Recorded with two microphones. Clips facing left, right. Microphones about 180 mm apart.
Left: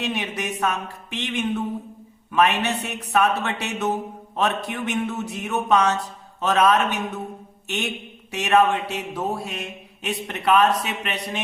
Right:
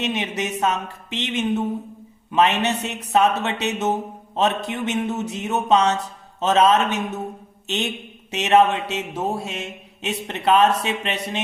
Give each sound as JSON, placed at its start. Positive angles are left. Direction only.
{"t": 0.0, "sound": "speech", "side_deg": -20}